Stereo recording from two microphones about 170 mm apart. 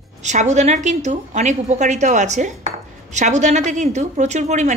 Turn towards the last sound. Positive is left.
turn(degrees=-45)  # may be behind; listen again after turning